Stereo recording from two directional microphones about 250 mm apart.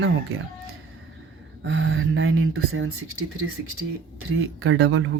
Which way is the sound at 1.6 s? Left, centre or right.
Right.